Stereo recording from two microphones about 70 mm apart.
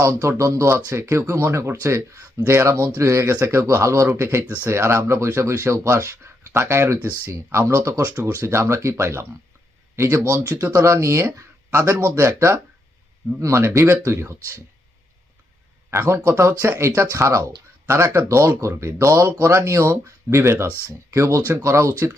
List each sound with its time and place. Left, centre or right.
0.0 s speech: right
16.0 s speech: right